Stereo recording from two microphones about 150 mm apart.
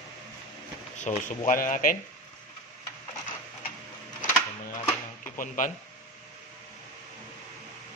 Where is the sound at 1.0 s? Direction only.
55° left (ahead or behind).